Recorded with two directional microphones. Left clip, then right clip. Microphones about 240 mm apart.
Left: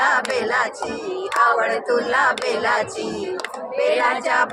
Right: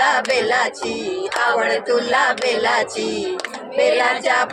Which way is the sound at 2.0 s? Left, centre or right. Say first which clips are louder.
Even; centre.